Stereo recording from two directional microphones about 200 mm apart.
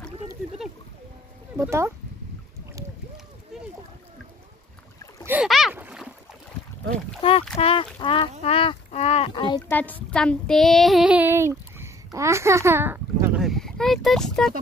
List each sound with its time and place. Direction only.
1.6 s speech: 15° right (ahead or behind)
5.2 s boat: 5° right (ahead or behind)
7.2 s speech: 30° left (ahead or behind)
9.7 s child singing: 10° left (ahead or behind)